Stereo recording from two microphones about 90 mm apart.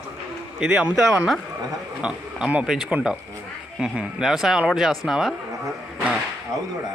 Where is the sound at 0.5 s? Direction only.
10° right (ahead or behind).